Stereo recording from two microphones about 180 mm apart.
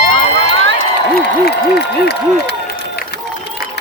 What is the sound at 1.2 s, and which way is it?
Speech, 65° left (ahead or behind).